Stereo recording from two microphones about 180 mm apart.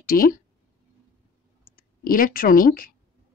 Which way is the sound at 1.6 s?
50° left (ahead or behind).